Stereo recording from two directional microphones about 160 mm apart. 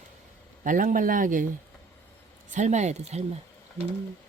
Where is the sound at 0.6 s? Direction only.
55° right (ahead or behind).